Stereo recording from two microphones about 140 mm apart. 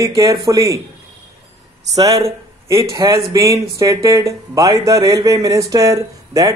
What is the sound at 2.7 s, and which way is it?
Speech, 20° right (ahead or behind).